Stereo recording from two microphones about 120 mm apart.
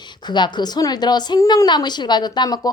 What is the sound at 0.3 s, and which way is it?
Speech, 40° left (ahead or behind).